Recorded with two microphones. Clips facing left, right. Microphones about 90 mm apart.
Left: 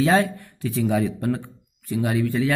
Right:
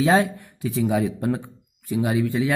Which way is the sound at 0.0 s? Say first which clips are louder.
Even; 15° right (ahead or behind).